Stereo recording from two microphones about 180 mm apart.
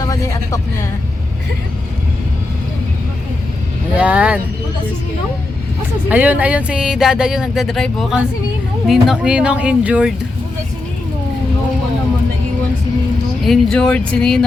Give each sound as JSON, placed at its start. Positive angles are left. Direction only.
{"t": 0.0, "sound": "speech", "side_deg": 20}
{"t": 3.9, "sound": "speech", "side_deg": -5}
{"t": 6.1, "sound": "speech", "side_deg": -10}
{"t": 13.4, "sound": "speech", "side_deg": 0}